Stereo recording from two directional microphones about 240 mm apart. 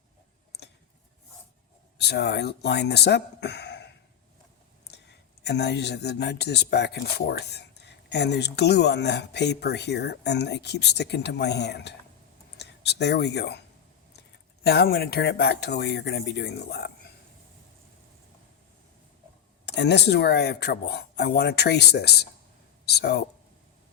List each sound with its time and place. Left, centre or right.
2.0 s speech: left
5.4 s speech: left
14.6 s speech: left
19.6 s speech: left